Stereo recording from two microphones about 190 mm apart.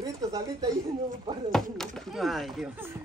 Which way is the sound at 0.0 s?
20° right (ahead or behind).